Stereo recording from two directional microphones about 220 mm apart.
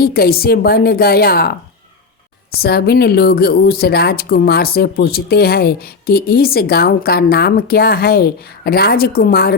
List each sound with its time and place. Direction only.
0.0 s speech: 45° left (ahead or behind)